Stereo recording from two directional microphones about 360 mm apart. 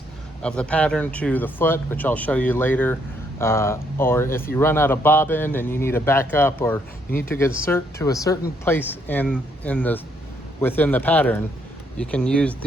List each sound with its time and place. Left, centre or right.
0.4 s speech: centre